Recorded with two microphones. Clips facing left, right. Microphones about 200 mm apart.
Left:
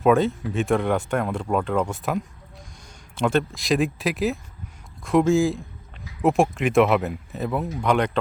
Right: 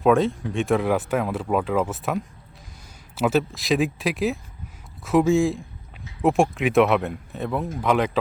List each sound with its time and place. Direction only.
0.0 s speech: centre (ahead or behind)